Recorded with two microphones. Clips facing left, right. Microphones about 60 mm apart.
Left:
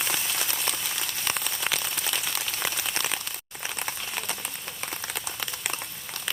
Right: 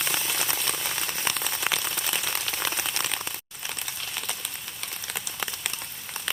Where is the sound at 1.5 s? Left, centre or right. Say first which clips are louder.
Right 1 dB; centre.